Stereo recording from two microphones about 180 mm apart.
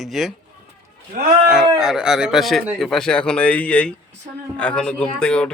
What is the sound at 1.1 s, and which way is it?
Speech, 50° right (ahead or behind).